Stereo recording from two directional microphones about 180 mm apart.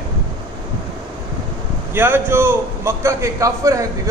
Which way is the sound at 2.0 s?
10° right (ahead or behind).